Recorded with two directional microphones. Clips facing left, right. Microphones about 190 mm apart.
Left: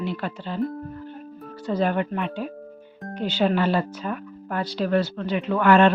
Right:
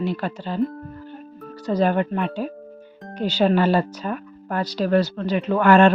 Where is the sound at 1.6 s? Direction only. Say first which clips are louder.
Right 3 dB; 40° right (ahead or behind).